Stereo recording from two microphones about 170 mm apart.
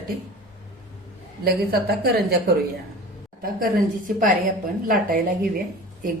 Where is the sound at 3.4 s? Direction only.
55° right (ahead or behind).